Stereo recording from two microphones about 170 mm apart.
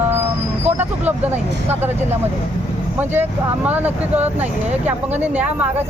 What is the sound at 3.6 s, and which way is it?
Speech, 10° right (ahead or behind).